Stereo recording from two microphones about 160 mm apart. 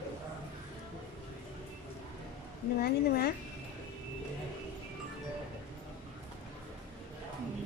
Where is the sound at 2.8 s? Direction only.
75° left (ahead or behind).